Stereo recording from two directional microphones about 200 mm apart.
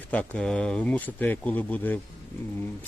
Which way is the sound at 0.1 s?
5° left (ahead or behind).